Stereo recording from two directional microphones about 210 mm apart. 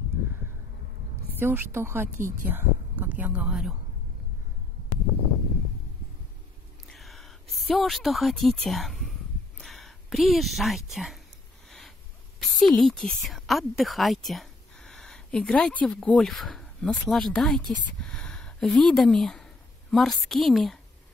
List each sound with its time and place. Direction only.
1.4 s a woman's voice: 10° right (ahead or behind)
2.1 s speech: 40° right (ahead or behind)
2.4 s speech: 10° right (ahead or behind)
6.9 s a sound: centre (ahead or behind)
10.9 s speech: centre (ahead or behind)
12.4 s a woman's voice: centre (ahead or behind)